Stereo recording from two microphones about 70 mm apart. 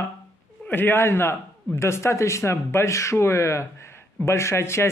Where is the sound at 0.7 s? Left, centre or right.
Left.